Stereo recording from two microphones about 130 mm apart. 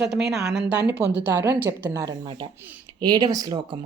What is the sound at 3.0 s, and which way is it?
Speech, 35° right (ahead or behind).